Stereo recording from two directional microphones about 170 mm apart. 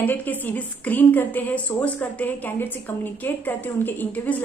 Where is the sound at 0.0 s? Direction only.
10° left (ahead or behind).